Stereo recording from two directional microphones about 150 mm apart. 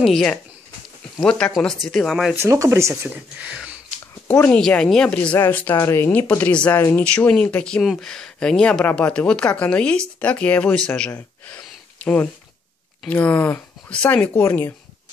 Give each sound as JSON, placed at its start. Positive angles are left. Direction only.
{"t": 0.0, "sound": "speech", "side_deg": 5}
{"t": 2.3, "sound": "speech", "side_deg": -20}
{"t": 4.3, "sound": "speech", "side_deg": 10}
{"t": 10.9, "sound": "gasp", "side_deg": 15}
{"t": 13.0, "sound": "speech", "side_deg": 10}